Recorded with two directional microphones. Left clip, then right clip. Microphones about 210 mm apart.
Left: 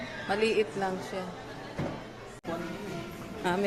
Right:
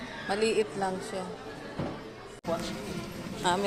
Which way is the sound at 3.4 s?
20° left (ahead or behind).